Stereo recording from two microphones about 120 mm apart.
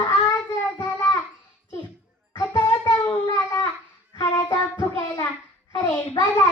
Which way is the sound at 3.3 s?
25° left (ahead or behind).